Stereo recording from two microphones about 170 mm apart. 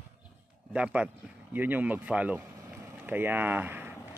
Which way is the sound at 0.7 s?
5° right (ahead or behind).